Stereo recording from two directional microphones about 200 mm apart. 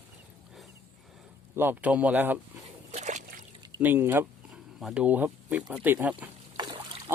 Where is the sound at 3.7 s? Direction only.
10° right (ahead or behind).